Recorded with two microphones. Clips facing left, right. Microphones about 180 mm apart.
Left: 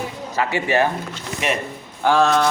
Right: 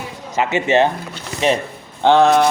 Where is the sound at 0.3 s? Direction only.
20° right (ahead or behind).